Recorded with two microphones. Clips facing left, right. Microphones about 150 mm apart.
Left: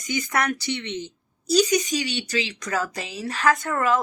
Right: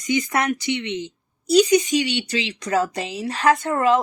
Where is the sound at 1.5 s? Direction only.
25° right (ahead or behind).